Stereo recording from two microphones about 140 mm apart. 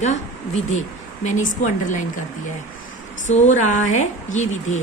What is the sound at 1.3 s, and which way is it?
Speech, 60° left (ahead or behind).